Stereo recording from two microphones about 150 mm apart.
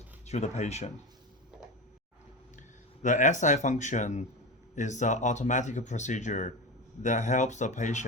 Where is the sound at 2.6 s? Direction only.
55° left (ahead or behind).